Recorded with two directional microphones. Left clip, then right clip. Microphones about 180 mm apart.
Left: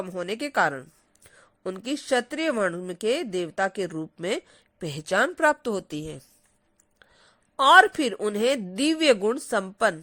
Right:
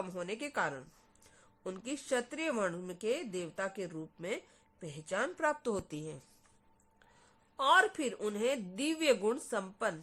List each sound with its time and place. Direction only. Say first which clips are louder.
0.2 s speech: left 13 dB; 35° left (ahead or behind)
7.5 s speech: left 12 dB; 40° left (ahead or behind)